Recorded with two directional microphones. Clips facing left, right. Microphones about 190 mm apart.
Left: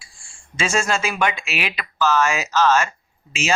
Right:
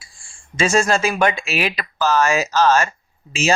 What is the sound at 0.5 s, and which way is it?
Speech, 40° right (ahead or behind).